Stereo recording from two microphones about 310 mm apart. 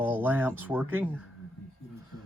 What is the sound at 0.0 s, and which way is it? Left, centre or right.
Speech, centre.